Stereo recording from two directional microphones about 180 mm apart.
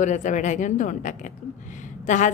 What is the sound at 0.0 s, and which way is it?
A woman's voice, 45° left (ahead or behind).